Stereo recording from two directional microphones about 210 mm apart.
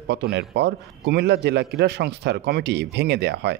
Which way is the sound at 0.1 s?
50° right (ahead or behind).